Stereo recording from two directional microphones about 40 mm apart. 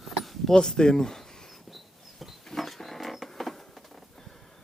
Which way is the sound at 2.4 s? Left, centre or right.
Centre.